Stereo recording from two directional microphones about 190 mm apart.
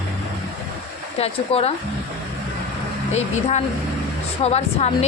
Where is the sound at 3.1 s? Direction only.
35° left (ahead or behind).